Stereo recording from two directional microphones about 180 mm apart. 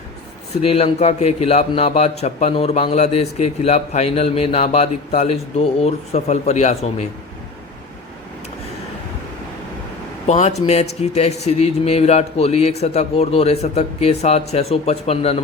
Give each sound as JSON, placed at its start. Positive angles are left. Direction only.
{"t": 0.7, "sound": "a man's voice", "side_deg": 35}
{"t": 10.2, "sound": "a man's voice", "side_deg": 40}